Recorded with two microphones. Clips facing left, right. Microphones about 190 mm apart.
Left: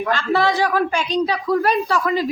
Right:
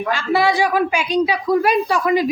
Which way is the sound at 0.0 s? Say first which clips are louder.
Right 1 dB; 10° right (ahead or behind).